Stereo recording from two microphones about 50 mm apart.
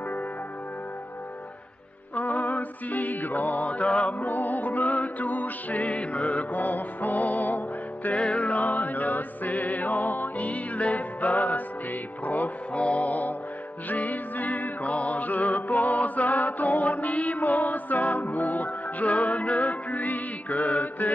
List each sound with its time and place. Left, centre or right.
2.1 s music: left
4.3 s music: left
8.2 s music: left